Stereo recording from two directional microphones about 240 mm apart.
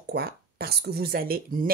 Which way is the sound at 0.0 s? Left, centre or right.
Right.